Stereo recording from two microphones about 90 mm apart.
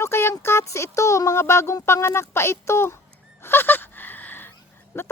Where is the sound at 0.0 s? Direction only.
30° left (ahead or behind).